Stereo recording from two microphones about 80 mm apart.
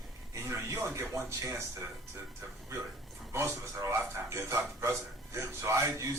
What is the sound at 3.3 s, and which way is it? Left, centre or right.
Speech, right.